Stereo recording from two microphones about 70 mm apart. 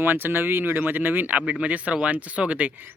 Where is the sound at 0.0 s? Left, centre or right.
Right.